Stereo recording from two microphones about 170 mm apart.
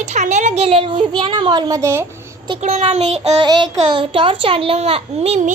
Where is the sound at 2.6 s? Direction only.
40° right (ahead or behind).